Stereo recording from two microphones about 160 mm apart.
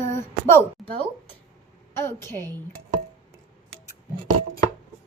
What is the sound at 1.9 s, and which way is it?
Speech, 15° left (ahead or behind).